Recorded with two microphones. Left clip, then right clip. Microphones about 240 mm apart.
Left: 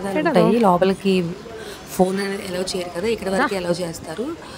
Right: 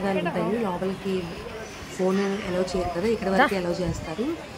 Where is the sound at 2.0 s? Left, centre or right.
Left.